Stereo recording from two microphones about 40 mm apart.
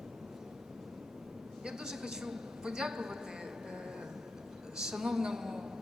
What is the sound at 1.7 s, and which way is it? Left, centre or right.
A man's voice, centre.